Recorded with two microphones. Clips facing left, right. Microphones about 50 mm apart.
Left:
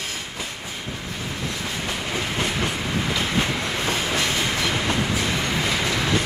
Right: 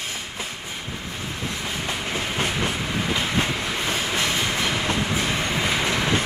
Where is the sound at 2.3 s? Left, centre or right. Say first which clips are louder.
Right 1 dB; right.